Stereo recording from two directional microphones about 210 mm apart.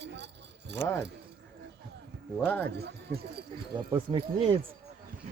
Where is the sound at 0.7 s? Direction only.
55° right (ahead or behind).